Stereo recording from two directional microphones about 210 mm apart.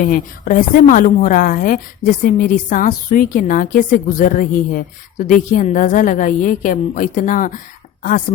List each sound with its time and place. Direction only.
0.0 s a woman's voice: 40° left (ahead or behind)